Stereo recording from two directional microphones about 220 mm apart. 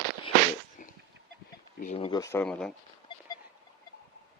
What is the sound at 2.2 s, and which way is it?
Speech, 10° left (ahead or behind).